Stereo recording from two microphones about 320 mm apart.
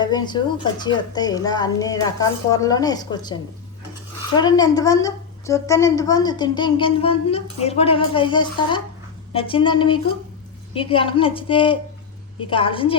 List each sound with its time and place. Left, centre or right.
0.0 s a woman's voice: centre
4.4 s a woman's voice: centre